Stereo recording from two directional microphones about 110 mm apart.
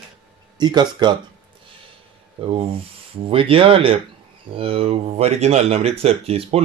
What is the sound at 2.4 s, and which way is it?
Speech, 55° right (ahead or behind).